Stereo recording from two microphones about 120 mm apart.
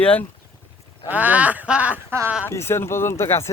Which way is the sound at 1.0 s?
15° right (ahead or behind).